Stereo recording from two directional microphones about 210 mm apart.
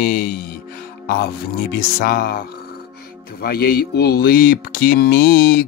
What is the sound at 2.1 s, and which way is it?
Speech, 45° left (ahead or behind).